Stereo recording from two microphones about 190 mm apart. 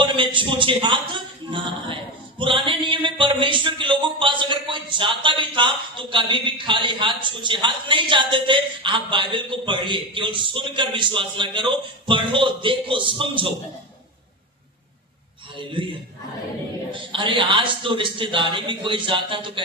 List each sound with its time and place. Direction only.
0.0 s speech: 25° right (ahead or behind)
16.9 s speech: 25° right (ahead or behind)